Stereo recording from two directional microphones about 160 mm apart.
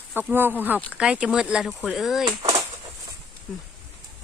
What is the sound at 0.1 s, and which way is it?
Speech, 10° right (ahead or behind).